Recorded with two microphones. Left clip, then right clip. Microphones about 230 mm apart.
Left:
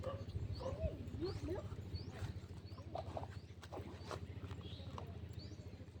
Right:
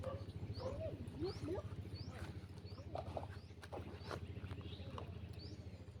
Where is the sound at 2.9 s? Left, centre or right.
Right.